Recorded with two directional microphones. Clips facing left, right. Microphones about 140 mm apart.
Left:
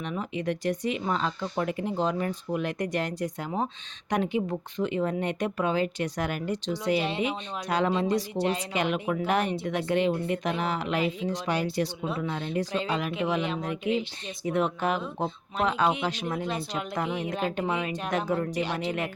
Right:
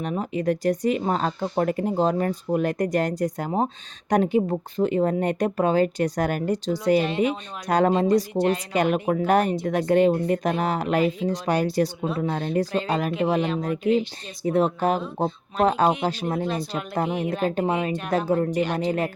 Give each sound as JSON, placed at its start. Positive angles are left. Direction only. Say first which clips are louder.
{"t": 0.0, "sound": "speech", "louder": "right 6 dB", "side_deg": -40}